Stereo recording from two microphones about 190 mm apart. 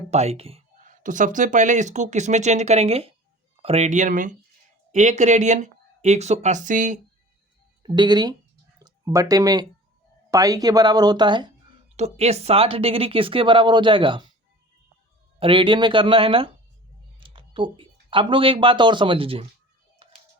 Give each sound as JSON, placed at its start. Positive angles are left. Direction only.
{"t": 0.1, "sound": "speech", "side_deg": -35}
{"t": 7.8, "sound": "a woman's voice", "side_deg": -25}
{"t": 11.9, "sound": "a woman's voice", "side_deg": -35}
{"t": 15.4, "sound": "a woman's voice", "side_deg": -30}
{"t": 17.2, "sound": "a sound", "side_deg": -25}
{"t": 18.1, "sound": "a woman's voice", "side_deg": -25}
{"t": 20.0, "sound": "music", "side_deg": -30}